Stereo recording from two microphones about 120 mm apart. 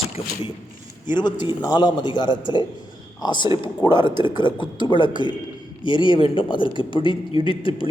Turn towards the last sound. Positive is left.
turn(degrees=45)  # may be behind; listen again after turning